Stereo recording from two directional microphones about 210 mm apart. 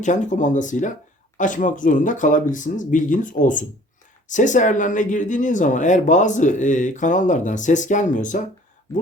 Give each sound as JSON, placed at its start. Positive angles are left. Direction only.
{"t": 0.0, "sound": "speech", "side_deg": 35}